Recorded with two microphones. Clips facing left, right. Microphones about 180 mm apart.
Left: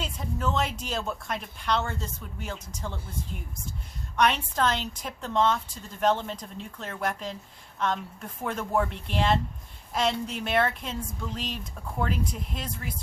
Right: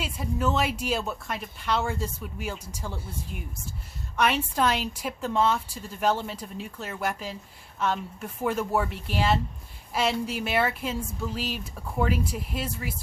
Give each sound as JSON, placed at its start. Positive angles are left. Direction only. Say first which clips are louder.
{"t": 0.0, "sound": "a woman's voice", "louder": "right 3 dB", "side_deg": -5}